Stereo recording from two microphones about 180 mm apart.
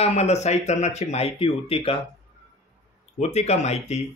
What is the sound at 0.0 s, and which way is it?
Speech, 35° left (ahead or behind).